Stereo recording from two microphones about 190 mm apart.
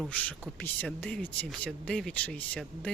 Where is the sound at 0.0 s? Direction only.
5° left (ahead or behind).